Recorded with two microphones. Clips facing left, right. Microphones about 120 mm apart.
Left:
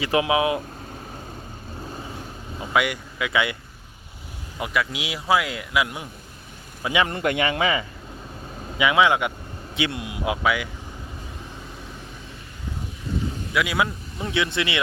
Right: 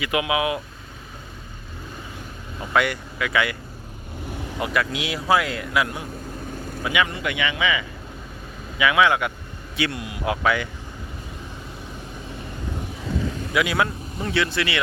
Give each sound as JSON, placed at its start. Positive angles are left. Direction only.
{"t": 0.0, "sound": "speech", "side_deg": 30}
{"t": 2.6, "sound": "speech", "side_deg": 10}
{"t": 4.6, "sound": "speech", "side_deg": 5}
{"t": 6.8, "sound": "speech", "side_deg": 30}
{"t": 7.1, "sound": "speech", "side_deg": 45}
{"t": 8.8, "sound": "speech", "side_deg": 20}
{"t": 10.4, "sound": "speech", "side_deg": 10}
{"t": 13.5, "sound": "speech", "side_deg": 5}